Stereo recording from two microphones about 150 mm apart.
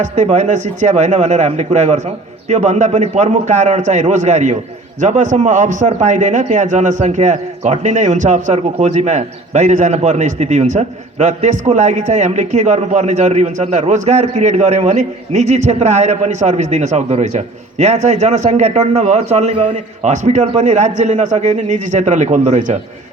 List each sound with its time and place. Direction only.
0.0 s a man's voice: 50° right (ahead or behind)